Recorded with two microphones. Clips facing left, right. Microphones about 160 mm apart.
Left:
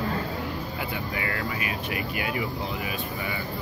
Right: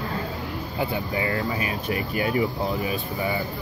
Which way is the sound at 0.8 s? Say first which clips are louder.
Right 10 dB; 30° right (ahead or behind).